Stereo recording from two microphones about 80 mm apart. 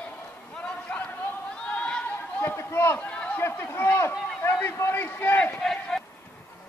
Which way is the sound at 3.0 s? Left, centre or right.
Centre.